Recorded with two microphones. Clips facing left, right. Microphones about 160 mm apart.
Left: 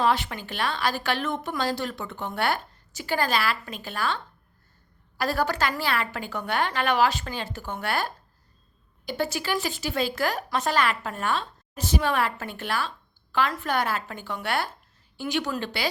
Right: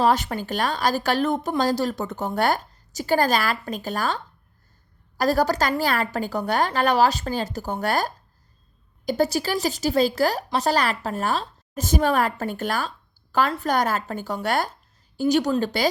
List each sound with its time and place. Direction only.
0.0 s a woman's voice: 40° right (ahead or behind)